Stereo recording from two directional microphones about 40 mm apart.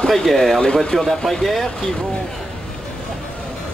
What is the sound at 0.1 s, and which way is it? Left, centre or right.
Speech, centre.